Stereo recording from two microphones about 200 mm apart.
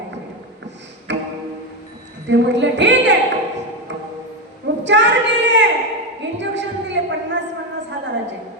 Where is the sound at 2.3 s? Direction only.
65° right (ahead or behind).